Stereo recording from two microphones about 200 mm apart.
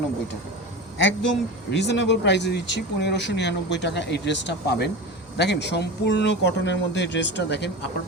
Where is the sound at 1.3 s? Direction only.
60° left (ahead or behind).